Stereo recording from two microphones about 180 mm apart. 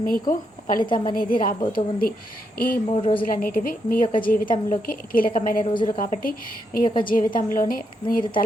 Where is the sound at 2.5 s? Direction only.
50° left (ahead or behind).